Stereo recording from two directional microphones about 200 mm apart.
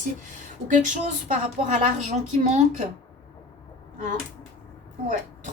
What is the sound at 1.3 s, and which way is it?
A woman's voice, 35° right (ahead or behind).